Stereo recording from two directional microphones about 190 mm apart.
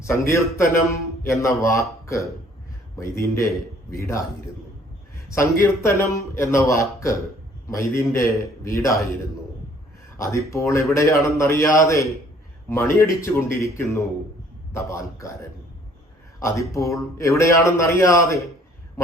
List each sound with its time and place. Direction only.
0.0 s a man's voice: 15° left (ahead or behind)
10.2 s a man's voice: 15° left (ahead or behind)
16.4 s a man's voice: 15° left (ahead or behind)